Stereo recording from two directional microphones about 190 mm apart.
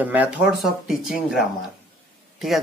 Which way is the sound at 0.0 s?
10° right (ahead or behind).